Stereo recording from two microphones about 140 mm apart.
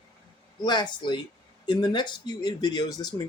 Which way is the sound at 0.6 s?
30° left (ahead or behind).